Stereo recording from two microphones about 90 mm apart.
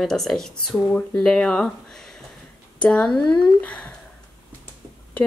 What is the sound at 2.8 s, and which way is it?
A woman's voice, 5° left (ahead or behind).